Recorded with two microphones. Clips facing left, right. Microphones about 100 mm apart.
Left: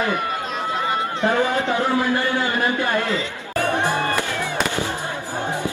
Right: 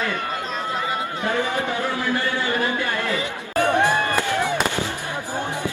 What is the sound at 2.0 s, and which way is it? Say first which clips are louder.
A man's voice: left 3 dB; 20° left (ahead or behind).